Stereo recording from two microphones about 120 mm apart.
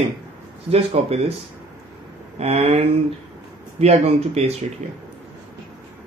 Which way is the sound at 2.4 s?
60° right (ahead or behind).